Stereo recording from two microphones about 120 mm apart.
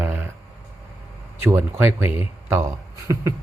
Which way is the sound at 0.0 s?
15° right (ahead or behind).